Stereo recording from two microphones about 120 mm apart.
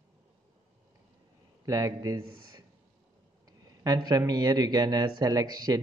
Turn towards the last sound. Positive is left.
turn(degrees=-35)  # may be behind; listen again after turning